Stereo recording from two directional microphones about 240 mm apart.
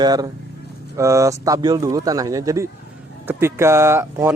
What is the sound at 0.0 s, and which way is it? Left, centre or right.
Speech, centre.